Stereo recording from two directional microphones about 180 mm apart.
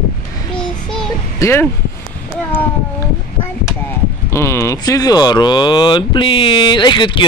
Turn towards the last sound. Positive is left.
turn(degrees=25)  # may be behind; listen again after turning